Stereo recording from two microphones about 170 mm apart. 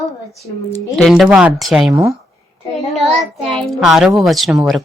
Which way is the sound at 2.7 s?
Centre (ahead or behind).